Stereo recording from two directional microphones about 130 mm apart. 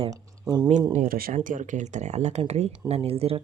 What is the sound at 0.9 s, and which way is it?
Speech, 90° right.